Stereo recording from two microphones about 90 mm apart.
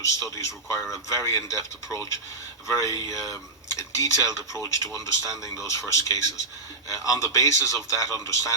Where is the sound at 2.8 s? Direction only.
35° left (ahead or behind).